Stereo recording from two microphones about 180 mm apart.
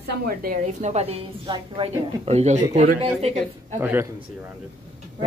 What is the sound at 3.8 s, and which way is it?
Speech, 10° right (ahead or behind).